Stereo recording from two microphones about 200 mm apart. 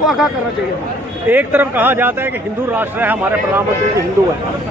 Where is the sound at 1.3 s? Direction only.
10° right (ahead or behind).